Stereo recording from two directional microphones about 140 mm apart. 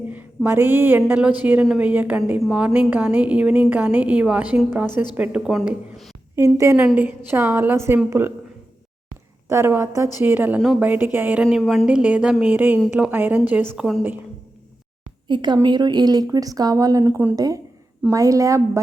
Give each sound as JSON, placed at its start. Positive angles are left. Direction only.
{"t": 0.1, "sound": "a woman's voice", "side_deg": -15}
{"t": 6.3, "sound": "a woman's voice", "side_deg": -20}
{"t": 9.5, "sound": "a woman's voice", "side_deg": -20}
{"t": 11.5, "sound": "a woman's voice", "side_deg": 0}
{"t": 11.9, "sound": "a woman's voice", "side_deg": -10}
{"t": 15.3, "sound": "a woman's voice", "side_deg": -30}
{"t": 17.3, "sound": "speech", "side_deg": -25}